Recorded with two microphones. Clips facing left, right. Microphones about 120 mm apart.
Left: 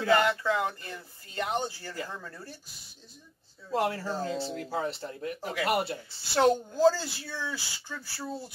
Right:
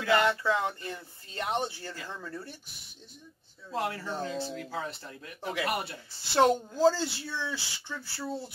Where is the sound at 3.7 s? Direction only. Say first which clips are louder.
Left 4 dB; 30° left (ahead or behind).